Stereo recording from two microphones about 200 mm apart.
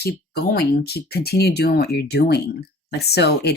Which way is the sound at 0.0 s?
55° left (ahead or behind).